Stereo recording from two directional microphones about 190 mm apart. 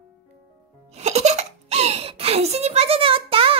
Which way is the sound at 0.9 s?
35° right (ahead or behind).